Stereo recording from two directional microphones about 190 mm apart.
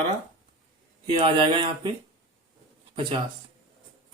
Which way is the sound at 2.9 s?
25° right (ahead or behind).